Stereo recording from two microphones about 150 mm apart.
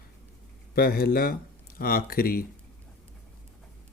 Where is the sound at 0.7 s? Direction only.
90° left.